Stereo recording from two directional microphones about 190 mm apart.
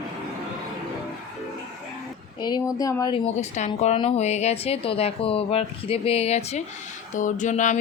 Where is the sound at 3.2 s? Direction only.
40° left (ahead or behind).